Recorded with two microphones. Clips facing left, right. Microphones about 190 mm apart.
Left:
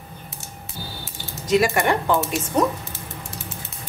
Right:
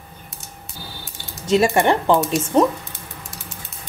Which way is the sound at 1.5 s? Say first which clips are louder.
Right 3 dB; 30° right (ahead or behind).